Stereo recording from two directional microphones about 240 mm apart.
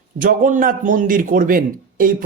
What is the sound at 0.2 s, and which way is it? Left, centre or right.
A man's voice, right.